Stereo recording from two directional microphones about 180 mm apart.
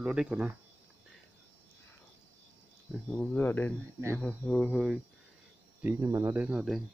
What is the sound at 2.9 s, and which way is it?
Speech, 5° left (ahead or behind).